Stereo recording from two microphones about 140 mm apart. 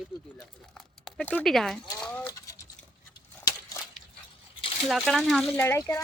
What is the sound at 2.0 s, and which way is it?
Goat, 10° left (ahead or behind).